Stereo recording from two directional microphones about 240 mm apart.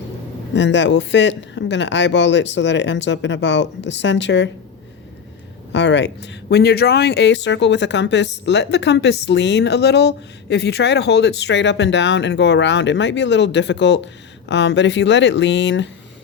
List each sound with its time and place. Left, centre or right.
0.5 s speech: left
5.7 s speech: left